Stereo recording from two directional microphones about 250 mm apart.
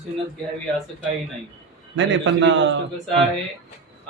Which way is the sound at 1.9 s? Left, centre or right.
Right.